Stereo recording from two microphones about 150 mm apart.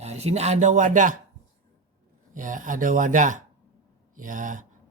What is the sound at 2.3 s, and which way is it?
A man's voice, 60° right (ahead or behind).